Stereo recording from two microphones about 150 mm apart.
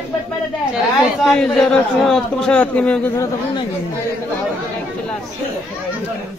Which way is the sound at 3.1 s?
20° left (ahead or behind).